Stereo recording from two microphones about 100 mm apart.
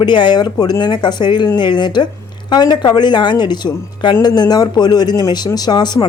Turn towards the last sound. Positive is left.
turn(degrees=45)  # may be behind; listen again after turning